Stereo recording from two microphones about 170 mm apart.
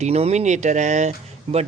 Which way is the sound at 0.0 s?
40° right (ahead or behind).